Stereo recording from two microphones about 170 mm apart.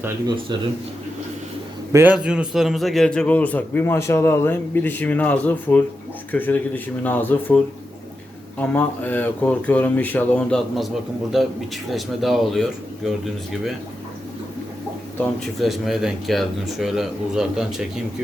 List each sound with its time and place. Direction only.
1.9 s a man's voice: 15° right (ahead or behind)
15.6 s speech: centre (ahead or behind)